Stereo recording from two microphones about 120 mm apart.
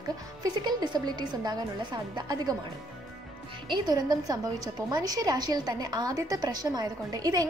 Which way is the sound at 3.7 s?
40° right (ahead or behind).